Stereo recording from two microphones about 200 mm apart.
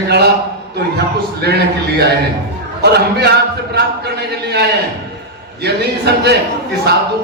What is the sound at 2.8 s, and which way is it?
A man's voice, 55° right (ahead or behind).